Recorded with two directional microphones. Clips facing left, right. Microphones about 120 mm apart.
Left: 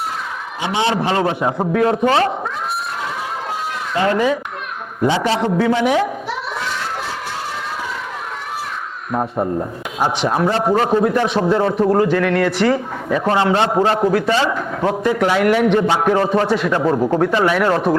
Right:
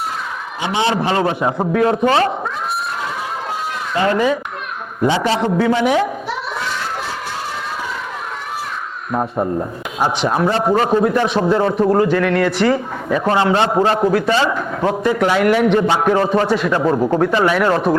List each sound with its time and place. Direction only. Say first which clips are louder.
0.6 s a man's voice: right 1 dB; 15° right (ahead or behind)
3.9 s a man's voice: right 1 dB; 20° right (ahead or behind)
9.1 s speech: right 1 dB; 35° right (ahead or behind)
10.0 s a man's voice: right 1 dB; 20° right (ahead or behind)